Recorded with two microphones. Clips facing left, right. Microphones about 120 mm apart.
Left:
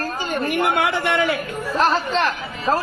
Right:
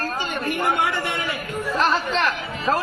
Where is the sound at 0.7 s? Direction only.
80° left.